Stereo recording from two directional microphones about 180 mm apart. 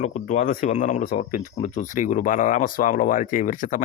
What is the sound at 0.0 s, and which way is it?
Speech, 45° left (ahead or behind).